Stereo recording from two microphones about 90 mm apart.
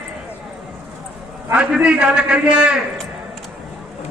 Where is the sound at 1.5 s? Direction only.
10° right (ahead or behind).